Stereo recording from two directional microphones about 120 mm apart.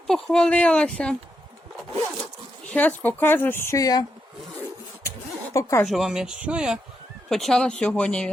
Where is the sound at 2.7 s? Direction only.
15° left (ahead or behind); by 4.0 s 30° left (ahead or behind).